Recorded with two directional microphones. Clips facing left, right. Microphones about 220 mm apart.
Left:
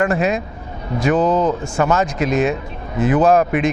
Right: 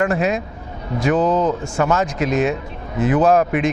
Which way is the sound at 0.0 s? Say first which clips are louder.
Left 1 dB; 20° left (ahead or behind).